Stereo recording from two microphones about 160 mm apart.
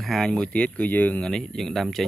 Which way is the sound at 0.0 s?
5° left (ahead or behind).